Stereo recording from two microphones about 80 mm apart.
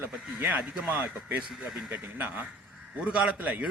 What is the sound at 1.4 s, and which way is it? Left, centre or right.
Speech, centre.